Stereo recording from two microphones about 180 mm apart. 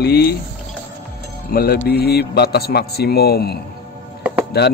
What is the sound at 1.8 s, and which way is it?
A man's voice, 60° left (ahead or behind).